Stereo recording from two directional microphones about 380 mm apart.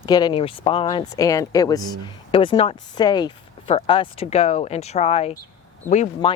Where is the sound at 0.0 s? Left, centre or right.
Centre.